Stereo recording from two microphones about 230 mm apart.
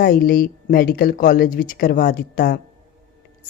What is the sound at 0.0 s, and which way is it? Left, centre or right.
Speech, left.